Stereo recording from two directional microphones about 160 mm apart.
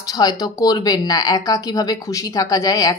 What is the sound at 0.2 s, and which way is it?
A woman's voice, 25° left (ahead or behind).